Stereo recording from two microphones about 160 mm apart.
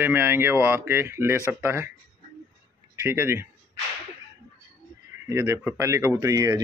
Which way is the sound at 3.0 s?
15° right (ahead or behind).